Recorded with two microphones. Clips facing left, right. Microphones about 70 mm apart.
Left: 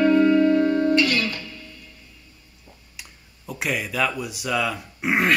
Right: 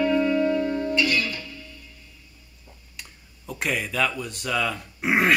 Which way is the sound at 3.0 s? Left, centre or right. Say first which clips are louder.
Right 1 dB; centre.